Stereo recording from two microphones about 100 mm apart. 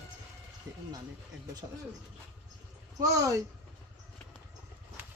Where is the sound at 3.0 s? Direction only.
35° right (ahead or behind).